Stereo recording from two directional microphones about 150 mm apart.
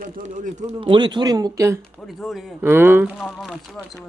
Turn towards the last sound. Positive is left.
turn(degrees=0)  # may be behind; listen again after turning